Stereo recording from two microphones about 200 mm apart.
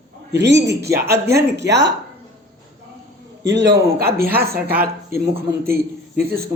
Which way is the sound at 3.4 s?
60° right (ahead or behind).